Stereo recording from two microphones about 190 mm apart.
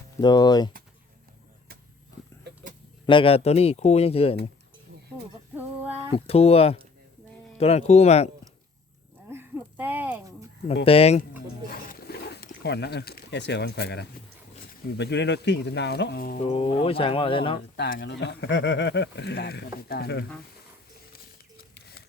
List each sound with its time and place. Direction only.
0.2 s speech: 20° left (ahead or behind)
3.1 s speech: 30° left (ahead or behind)
5.5 s female singing: 10° right (ahead or behind)
6.1 s speech: 30° left (ahead or behind)
9.3 s a sound: 10° right (ahead or behind)
10.8 s speech: 35° left (ahead or behind)
11.7 s a sound: 55° left (ahead or behind)
14.7 s speech: 65° left (ahead or behind)
16.4 s speech: 35° left (ahead or behind)
17.9 s speech: 60° left (ahead or behind)
21.6 s patter: 55° left (ahead or behind)